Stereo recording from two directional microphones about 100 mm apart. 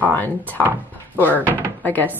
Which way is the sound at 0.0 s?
15° left (ahead or behind).